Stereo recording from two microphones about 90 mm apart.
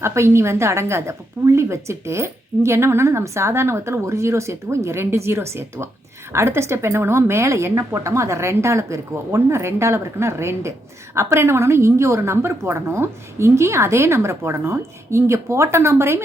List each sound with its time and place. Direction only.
0.0 s speech: 30° right (ahead or behind)